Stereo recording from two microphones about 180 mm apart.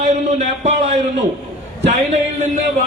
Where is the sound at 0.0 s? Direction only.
40° right (ahead or behind).